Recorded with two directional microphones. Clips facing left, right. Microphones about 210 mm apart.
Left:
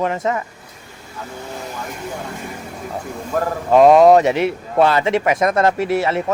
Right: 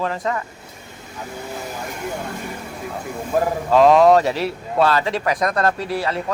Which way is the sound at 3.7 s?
20° left (ahead or behind).